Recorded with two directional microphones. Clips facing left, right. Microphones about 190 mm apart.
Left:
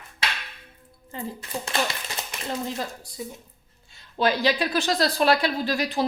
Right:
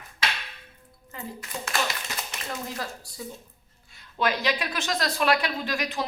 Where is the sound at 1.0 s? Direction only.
30° left (ahead or behind).